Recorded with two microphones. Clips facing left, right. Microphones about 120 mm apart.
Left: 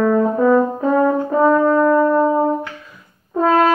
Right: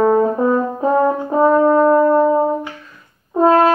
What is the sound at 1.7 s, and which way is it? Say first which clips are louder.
Music: right 2 dB; 25° right (ahead or behind).